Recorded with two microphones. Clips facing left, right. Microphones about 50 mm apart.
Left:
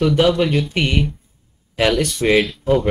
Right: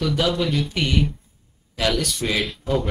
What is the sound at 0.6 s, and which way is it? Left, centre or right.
Speech, left.